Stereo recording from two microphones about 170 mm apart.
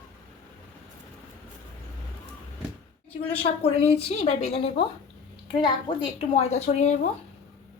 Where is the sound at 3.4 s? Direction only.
35° left (ahead or behind).